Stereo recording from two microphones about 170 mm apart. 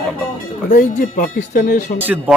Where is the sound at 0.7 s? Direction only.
50° left (ahead or behind).